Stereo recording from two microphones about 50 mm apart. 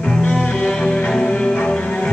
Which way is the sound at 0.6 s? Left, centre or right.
Centre.